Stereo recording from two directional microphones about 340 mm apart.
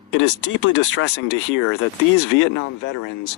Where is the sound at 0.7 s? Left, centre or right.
Left.